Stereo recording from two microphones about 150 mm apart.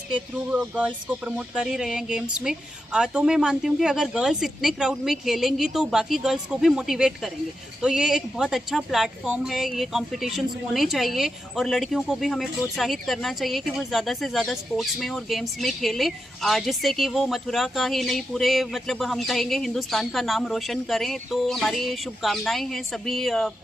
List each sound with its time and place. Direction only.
0.5 s a woman's voice: 10° right (ahead or behind)